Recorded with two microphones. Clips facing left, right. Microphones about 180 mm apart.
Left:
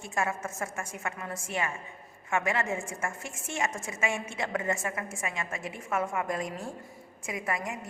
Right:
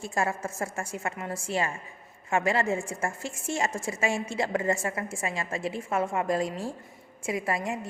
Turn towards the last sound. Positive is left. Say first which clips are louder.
# right 4 dB
turn(degrees=-30)  # may be behind; listen again after turning